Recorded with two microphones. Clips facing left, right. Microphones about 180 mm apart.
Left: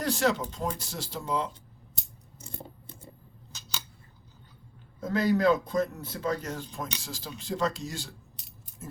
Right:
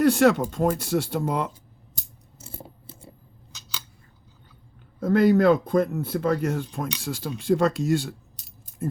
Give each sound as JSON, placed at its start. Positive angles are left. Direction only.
{"t": 0.0, "sound": "speech", "side_deg": -60}
{"t": 2.4, "sound": "scissors", "side_deg": -5}
{"t": 4.9, "sound": "speech", "side_deg": -55}